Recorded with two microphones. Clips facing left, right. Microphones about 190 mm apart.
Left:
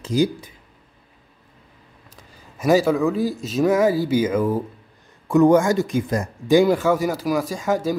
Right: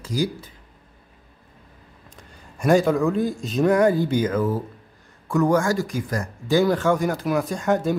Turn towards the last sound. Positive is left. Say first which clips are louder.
# even
turn(degrees=0)  # may be behind; listen again after turning